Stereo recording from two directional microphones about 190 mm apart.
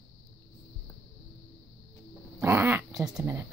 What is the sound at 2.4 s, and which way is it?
Dog, 15° right (ahead or behind).